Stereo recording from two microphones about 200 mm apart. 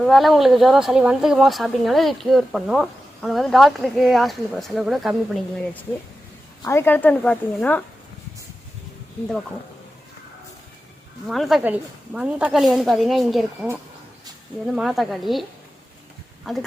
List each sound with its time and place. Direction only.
0.0 s speech: centre (ahead or behind)
6.7 s speech: 10° left (ahead or behind)
11.3 s speech: centre (ahead or behind)
14.7 s speech: centre (ahead or behind)